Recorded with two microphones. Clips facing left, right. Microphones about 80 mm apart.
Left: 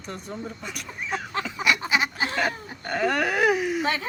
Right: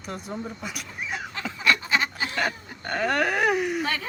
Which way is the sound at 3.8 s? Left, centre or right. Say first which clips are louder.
Left 2 dB; left.